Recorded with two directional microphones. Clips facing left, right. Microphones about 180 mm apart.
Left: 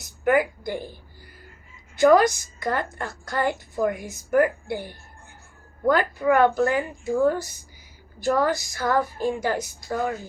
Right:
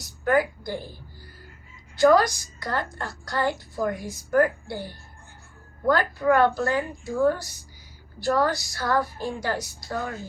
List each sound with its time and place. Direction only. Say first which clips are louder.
0.3 s a woman's voice: left 2 dB; 15° left (ahead or behind)
2.0 s a woman's voice: left 2 dB; 20° left (ahead or behind)
5.9 s a woman's voice: left 1 dB; 15° left (ahead or behind)